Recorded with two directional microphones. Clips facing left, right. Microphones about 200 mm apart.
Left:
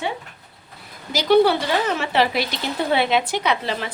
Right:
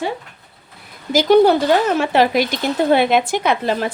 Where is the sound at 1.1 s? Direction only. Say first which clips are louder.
Right 4 dB; 45° right (ahead or behind).